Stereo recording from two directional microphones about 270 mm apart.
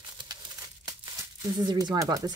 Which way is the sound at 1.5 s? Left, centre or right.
Centre.